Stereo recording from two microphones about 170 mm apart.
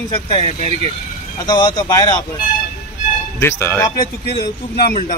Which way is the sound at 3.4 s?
15° left (ahead or behind).